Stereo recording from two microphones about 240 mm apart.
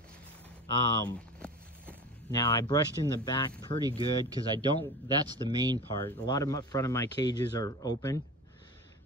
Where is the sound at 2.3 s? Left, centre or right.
Centre.